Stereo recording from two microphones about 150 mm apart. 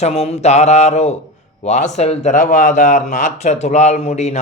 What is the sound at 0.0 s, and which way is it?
Speech, 45° left (ahead or behind).